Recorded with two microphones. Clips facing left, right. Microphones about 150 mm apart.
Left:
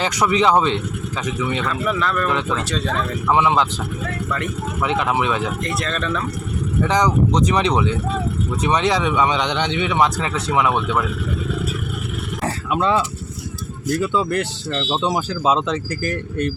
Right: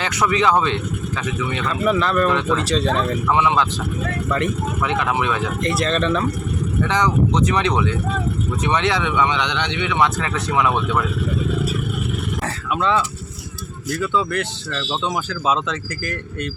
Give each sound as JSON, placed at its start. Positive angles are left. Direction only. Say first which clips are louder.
{"t": 0.3, "sound": "speech", "louder": "left 1 dB", "side_deg": 25}
{"t": 2.3, "sound": "speech", "louder": "right 3 dB", "side_deg": 5}
{"t": 3.3, "sound": "speech", "louder": "left 2 dB", "side_deg": 25}
{"t": 4.9, "sound": "speech", "louder": "left 2 dB", "side_deg": 25}
{"t": 5.6, "sound": "speech", "louder": "right 4 dB", "side_deg": 0}
{"t": 6.0, "sound": "speech", "louder": "right 4 dB", "side_deg": -25}
{"t": 8.6, "sound": "speech", "louder": "left 2 dB", "side_deg": 15}
{"t": 9.3, "sound": "speech", "louder": "left 2 dB", "side_deg": 45}
{"t": 9.7, "sound": "speech", "louder": "left 1 dB", "side_deg": 25}
{"t": 10.2, "sound": "speech", "louder": "left 1 dB", "side_deg": 10}
{"t": 14.1, "sound": "speech", "louder": "left 1 dB", "side_deg": 40}
{"t": 14.7, "sound": "speech", "louder": "left 3 dB", "side_deg": 20}
{"t": 15.0, "sound": "speech", "louder": "left 2 dB", "side_deg": 35}